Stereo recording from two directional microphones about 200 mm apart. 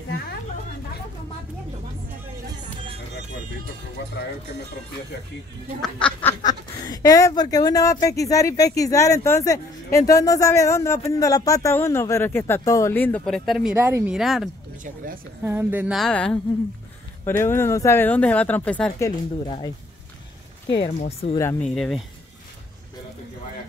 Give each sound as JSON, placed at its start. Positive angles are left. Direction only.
{"t": 2.5, "sound": "music", "side_deg": -25}
{"t": 5.8, "sound": "speech", "side_deg": 5}
{"t": 6.4, "sound": "speech", "side_deg": 20}
{"t": 13.7, "sound": "speech", "side_deg": -10}
{"t": 19.0, "sound": "speech", "side_deg": 20}
{"t": 21.0, "sound": "speech", "side_deg": 30}
{"t": 21.4, "sound": "speech", "side_deg": 10}